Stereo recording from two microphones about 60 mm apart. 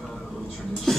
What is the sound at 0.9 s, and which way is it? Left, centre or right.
Beatboxing, centre.